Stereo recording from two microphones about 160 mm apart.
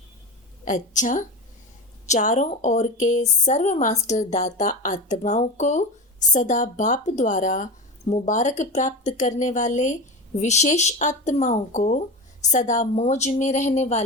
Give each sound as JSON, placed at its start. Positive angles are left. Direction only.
{"t": 0.6, "sound": "speech", "side_deg": 50}